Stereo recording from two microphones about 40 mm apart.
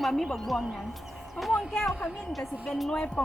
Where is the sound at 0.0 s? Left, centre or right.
Centre.